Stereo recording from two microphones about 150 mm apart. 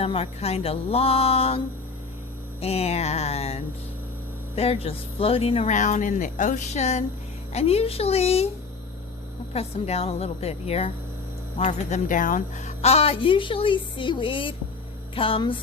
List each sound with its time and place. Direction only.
0.0 s a woman's voice: 40° left (ahead or behind)
9.5 s a woman's voice: 45° left (ahead or behind)